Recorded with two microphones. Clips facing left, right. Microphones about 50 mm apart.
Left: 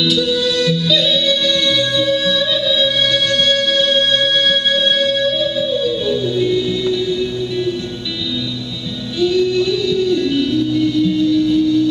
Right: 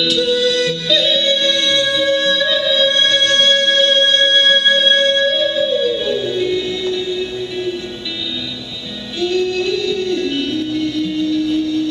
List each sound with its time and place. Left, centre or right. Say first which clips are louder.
0.0 s music: right 1 dB; centre
9.2 s music: left 2 dB; centre